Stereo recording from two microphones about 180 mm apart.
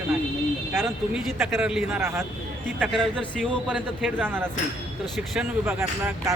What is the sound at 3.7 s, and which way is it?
Speech, 10° right (ahead or behind).